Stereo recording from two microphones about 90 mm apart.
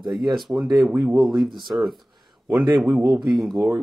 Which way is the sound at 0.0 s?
55° right (ahead or behind).